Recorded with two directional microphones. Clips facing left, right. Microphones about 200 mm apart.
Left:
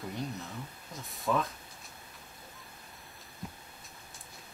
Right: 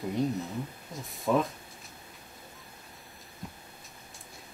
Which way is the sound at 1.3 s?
10° right (ahead or behind).